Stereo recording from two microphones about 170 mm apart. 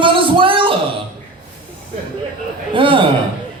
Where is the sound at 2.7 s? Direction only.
30° right (ahead or behind).